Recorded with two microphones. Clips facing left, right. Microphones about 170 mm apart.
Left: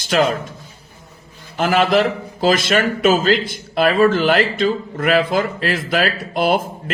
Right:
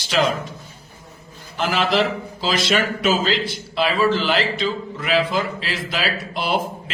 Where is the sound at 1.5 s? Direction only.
50° left (ahead or behind).